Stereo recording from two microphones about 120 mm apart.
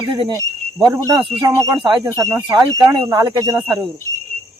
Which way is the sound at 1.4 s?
30° right (ahead or behind).